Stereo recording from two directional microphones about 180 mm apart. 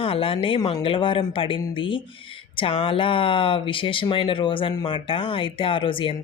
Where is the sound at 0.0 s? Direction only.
30° left (ahead or behind).